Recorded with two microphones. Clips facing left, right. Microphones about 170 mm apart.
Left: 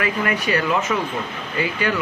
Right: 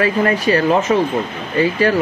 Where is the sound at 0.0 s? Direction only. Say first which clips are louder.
Right 7 dB; 35° right (ahead or behind).